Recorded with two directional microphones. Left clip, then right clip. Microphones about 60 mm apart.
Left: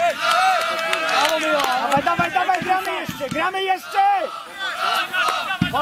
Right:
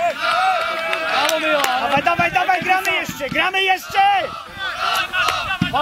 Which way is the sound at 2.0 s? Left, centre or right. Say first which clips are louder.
Right 2 dB; right.